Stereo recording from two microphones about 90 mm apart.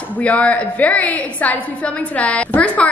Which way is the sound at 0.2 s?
15° left (ahead or behind).